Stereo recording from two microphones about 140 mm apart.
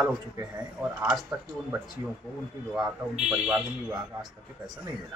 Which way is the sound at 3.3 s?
10° right (ahead or behind).